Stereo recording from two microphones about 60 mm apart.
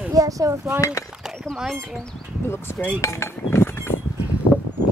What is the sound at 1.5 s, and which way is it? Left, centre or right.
Speech, centre.